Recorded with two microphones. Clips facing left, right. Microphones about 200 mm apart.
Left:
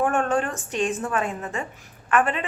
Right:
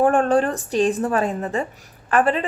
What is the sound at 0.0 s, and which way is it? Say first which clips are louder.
Speech: right 6 dB; 35° right (ahead or behind).